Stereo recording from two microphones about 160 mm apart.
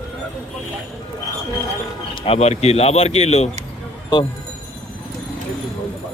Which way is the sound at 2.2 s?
40° left (ahead or behind).